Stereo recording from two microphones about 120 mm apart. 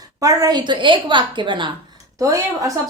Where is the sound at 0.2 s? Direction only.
30° right (ahead or behind).